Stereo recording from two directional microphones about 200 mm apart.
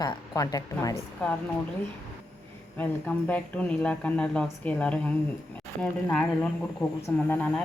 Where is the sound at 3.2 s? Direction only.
5° left (ahead or behind).